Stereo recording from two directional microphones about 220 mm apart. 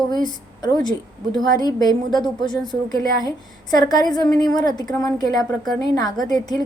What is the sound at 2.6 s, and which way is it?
Speech, centre (ahead or behind).